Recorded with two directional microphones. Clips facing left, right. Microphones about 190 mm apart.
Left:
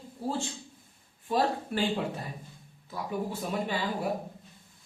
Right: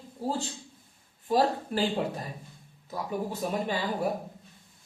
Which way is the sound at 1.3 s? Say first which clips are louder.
Right 3 dB; 35° right (ahead or behind).